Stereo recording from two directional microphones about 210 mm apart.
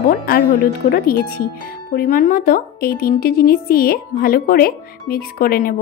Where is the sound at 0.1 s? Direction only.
45° left (ahead or behind).